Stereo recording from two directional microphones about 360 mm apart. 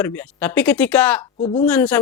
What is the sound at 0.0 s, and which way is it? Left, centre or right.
Speech, centre.